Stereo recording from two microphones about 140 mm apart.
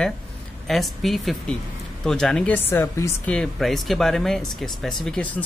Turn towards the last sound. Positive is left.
turn(degrees=10)  # may be behind; listen again after turning